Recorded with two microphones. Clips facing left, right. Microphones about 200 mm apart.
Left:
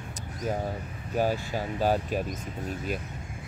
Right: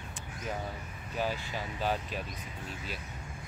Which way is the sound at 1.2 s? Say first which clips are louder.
Left 7 dB; 45° left (ahead or behind).